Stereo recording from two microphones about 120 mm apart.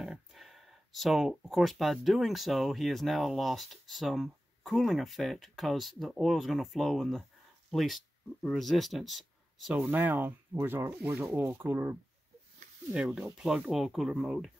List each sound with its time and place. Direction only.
0.0 s speech: centre (ahead or behind)
9.8 s speech: 15° right (ahead or behind)
12.9 s speech: 5° right (ahead or behind)